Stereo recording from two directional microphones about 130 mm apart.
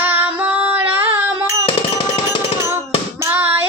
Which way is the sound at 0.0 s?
15° right (ahead or behind).